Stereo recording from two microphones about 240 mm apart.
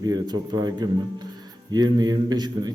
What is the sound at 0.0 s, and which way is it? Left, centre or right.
A man's voice, centre.